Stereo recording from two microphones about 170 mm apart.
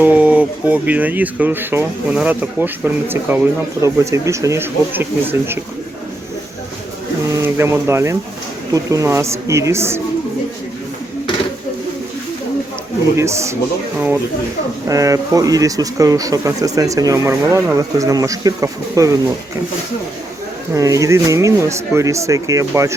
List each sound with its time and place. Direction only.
0.0 s speech: 10° right (ahead or behind)
7.3 s speech: 15° right (ahead or behind)
13.1 s speech: 15° right (ahead or behind)
14.8 s speech: 20° right (ahead or behind)
20.7 s speech: 20° right (ahead or behind)